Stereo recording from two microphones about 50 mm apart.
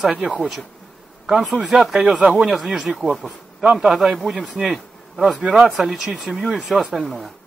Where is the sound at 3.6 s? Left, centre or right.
Centre.